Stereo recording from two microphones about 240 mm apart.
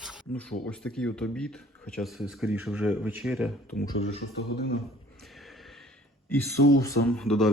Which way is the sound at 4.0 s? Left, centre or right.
Left.